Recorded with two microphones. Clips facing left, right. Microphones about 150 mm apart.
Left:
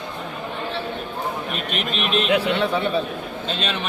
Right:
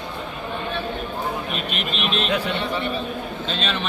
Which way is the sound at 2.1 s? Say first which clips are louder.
Left 5 dB; 55° left (ahead or behind).